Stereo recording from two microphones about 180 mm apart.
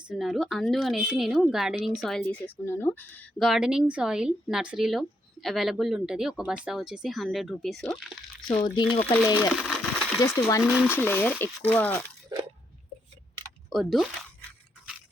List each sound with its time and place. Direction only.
0.1 s speech: centre (ahead or behind)
8.4 s speech: 25° left (ahead or behind)
9.0 s speech: 15° left (ahead or behind)
9.6 s a sound: centre (ahead or behind)
10.2 s speech: 15° left (ahead or behind)
10.6 s speech: 5° right (ahead or behind)
10.8 s speech: 10° left (ahead or behind)
12.3 s a sound: 25° right (ahead or behind)